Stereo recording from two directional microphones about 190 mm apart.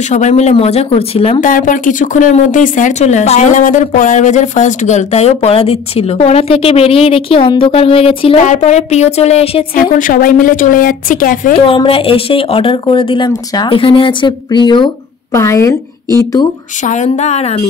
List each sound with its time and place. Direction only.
0.1 s speech: 35° left (ahead or behind)
1.4 s speech: 45° left (ahead or behind)
9.8 s a woman's voice: 45° left (ahead or behind)
11.5 s a woman's voice: 30° left (ahead or behind)
16.8 s speech: 40° left (ahead or behind)